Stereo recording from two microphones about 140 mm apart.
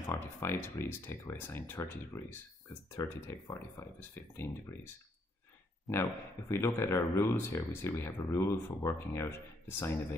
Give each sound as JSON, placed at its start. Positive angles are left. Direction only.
{"t": 0.0, "sound": "speech", "side_deg": 20}
{"t": 5.9, "sound": "speech", "side_deg": 0}
{"t": 6.5, "sound": "speech", "side_deg": 20}